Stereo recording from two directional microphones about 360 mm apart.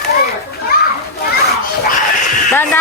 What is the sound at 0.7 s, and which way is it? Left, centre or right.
Children playing, left.